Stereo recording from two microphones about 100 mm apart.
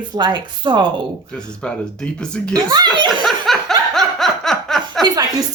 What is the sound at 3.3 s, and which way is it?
Snicker, centre (ahead or behind).